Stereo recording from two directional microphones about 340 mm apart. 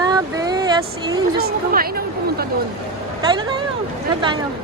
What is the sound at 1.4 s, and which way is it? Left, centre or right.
A woman's voice, right.